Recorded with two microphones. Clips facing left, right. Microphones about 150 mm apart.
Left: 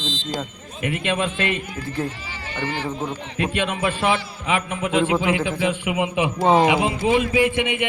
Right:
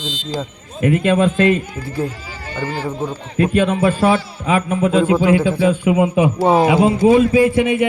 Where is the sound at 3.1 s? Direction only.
40° right (ahead or behind).